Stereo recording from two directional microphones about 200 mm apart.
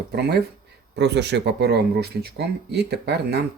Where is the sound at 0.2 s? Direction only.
55° right (ahead or behind).